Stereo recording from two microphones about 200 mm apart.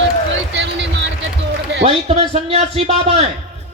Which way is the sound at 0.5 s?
60° right (ahead or behind).